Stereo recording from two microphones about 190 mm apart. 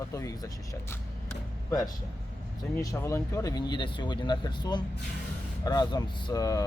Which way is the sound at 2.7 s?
15° left (ahead or behind).